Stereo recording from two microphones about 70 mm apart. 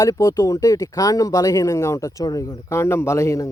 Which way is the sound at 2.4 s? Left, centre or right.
Left.